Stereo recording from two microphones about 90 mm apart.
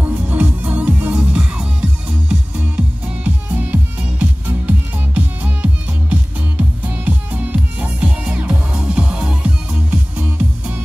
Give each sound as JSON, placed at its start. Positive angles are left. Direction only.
{"t": 0.0, "sound": "music", "side_deg": -20}